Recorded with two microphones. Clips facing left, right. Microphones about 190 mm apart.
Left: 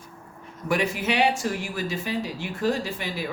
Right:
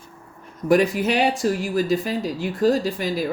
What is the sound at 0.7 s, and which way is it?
Speech, 40° right (ahead or behind).